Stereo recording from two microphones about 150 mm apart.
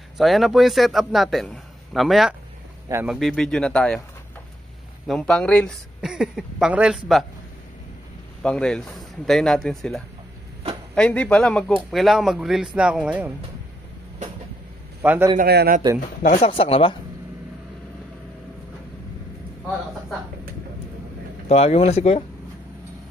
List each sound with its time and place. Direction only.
0.2 s a man's voice: centre (ahead or behind)
5.0 s a man's voice: 5° left (ahead or behind)
5.9 s a man's voice: 5° right (ahead or behind)
8.4 s a man's voice: 5° left (ahead or behind)
15.0 s a man's voice: 15° right (ahead or behind)
15.3 s a man's voice: 90° right
16.2 s speech: 60° left (ahead or behind)
16.4 s speech: 40° left (ahead or behind)
21.5 s speech: 45° left (ahead or behind)